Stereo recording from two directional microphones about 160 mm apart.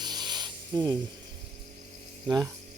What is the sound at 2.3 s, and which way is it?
Speech, 20° right (ahead or behind).